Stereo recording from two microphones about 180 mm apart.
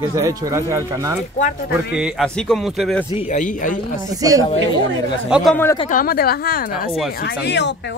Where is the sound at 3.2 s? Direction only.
45° left (ahead or behind).